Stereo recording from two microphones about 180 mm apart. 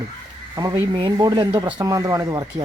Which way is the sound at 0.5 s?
20° right (ahead or behind).